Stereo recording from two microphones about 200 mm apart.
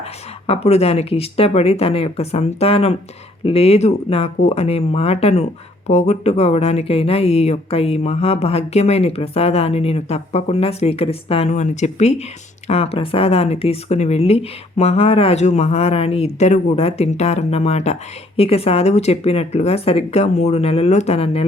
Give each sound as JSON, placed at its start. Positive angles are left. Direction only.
{"t": 0.4, "sound": "speech", "side_deg": 30}